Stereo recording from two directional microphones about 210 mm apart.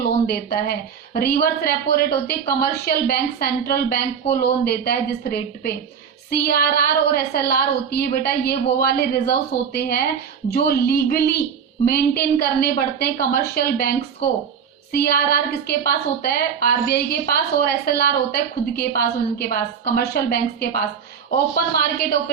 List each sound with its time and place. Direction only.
0.3 s a woman's voice: 50° left (ahead or behind)
14.9 s a woman's voice: 45° left (ahead or behind)